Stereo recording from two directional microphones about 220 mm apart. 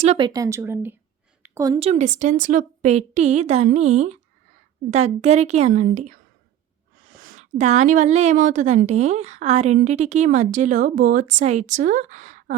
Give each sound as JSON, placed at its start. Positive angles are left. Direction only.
{"t": 0.0, "sound": "a woman's voice", "side_deg": -25}
{"t": 7.0, "sound": "a sound", "side_deg": -40}
{"t": 7.6, "sound": "a woman's voice", "side_deg": -35}